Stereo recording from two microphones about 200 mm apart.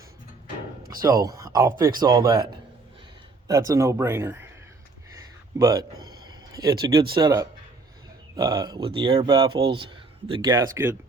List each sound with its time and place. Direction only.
1.0 s speech: 20° right (ahead or behind)
5.5 s speech: 15° right (ahead or behind)